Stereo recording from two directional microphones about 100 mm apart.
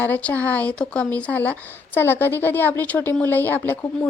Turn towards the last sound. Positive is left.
turn(degrees=20)  # may be behind; listen again after turning